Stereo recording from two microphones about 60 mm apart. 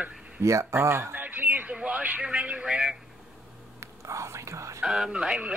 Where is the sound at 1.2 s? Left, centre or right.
Right; by 2.9 s centre.